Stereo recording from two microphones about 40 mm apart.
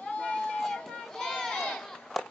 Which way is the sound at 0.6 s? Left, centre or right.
Centre.